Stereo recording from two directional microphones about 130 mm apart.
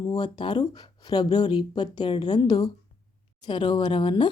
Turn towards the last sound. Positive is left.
turn(degrees=35)  # may be behind; listen again after turning